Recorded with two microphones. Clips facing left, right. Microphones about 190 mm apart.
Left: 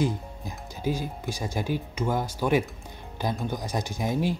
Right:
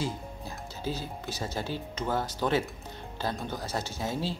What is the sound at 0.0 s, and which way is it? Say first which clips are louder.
Speech: left 6 dB; 15° left (ahead or behind).